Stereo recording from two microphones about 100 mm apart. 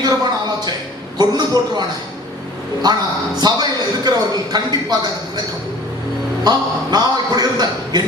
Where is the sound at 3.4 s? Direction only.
45° right (ahead or behind).